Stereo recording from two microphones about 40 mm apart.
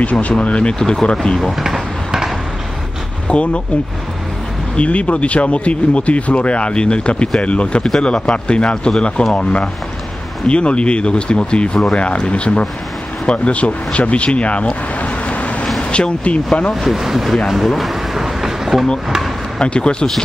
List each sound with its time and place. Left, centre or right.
0.0 s speech: left
0.7 s speech: centre
1.6 s a sound: centre
3.3 s speech: left
4.7 s speech: left
16.8 s speech: centre
17.5 s a sound: centre
19.0 s speech: centre
19.6 s speech: left